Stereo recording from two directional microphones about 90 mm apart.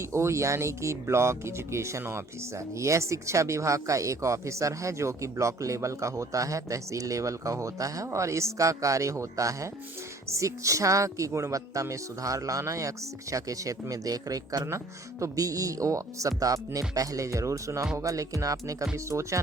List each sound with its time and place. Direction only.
0.0 s speech: 30° right (ahead or behind)